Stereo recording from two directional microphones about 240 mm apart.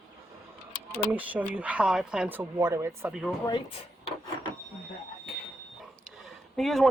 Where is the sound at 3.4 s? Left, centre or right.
Centre.